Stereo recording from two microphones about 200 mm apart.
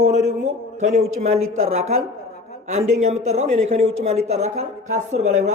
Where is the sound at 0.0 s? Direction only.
35° right (ahead or behind).